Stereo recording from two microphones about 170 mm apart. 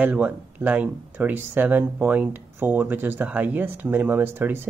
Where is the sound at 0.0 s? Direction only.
10° right (ahead or behind).